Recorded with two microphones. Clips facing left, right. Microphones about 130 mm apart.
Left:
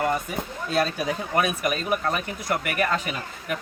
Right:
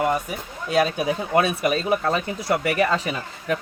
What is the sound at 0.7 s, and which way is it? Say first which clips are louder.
Speech: right 4 dB; 15° right (ahead or behind).